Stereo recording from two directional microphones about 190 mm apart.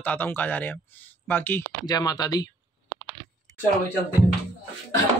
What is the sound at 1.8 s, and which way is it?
Speech, 20° left (ahead or behind).